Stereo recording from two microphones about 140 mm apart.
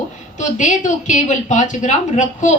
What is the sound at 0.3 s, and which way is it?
A woman's voice, 60° left (ahead or behind).